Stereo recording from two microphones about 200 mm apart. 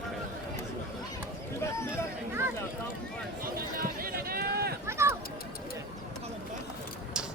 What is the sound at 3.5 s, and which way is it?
Run, 45° right (ahead or behind).